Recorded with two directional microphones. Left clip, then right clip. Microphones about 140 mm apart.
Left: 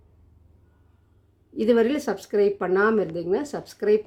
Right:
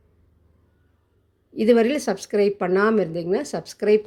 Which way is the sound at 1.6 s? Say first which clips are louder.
Right 3 dB; 20° right (ahead or behind).